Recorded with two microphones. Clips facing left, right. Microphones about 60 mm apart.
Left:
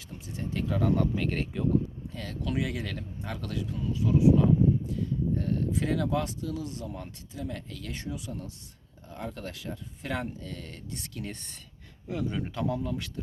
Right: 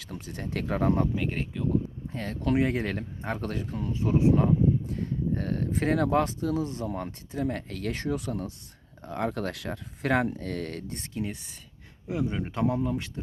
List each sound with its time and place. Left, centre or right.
0.0 s speech: right
0.8 s speech: right
1.1 s speech: centre
2.0 s speech: right
11.2 s speech: centre
12.0 s speech: right